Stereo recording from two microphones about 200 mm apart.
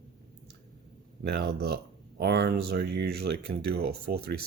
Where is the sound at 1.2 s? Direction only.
50° right (ahead or behind).